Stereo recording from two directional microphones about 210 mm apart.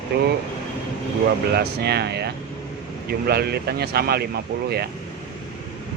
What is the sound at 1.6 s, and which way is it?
Speech, 50° right (ahead or behind).